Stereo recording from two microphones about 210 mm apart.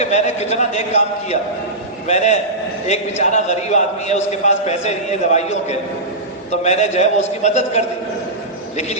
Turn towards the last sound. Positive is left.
turn(degrees=35)  # may be behind; listen again after turning